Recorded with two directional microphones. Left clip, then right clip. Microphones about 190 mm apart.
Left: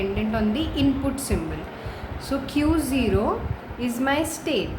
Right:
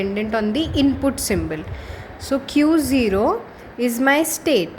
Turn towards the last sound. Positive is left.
turn(degrees=-40)  # may be behind; listen again after turning